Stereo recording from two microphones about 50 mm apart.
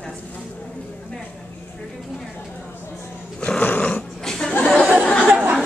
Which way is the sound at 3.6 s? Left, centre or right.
Left.